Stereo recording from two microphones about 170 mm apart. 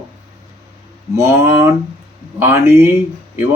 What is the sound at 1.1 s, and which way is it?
Speech, 15° right (ahead or behind).